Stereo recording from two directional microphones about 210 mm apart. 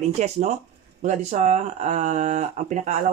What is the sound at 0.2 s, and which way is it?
Speech, 35° right (ahead or behind).